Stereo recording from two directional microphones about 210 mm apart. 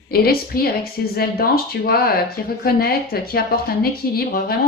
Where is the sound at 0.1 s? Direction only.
45° left (ahead or behind).